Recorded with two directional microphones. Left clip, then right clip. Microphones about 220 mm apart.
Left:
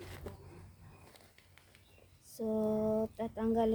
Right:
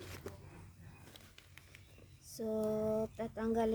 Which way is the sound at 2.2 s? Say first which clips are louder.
Left 2 dB; 10° right (ahead or behind).